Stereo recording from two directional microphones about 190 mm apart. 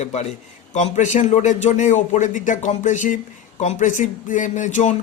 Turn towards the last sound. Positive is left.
turn(degrees=40)  # may be behind; listen again after turning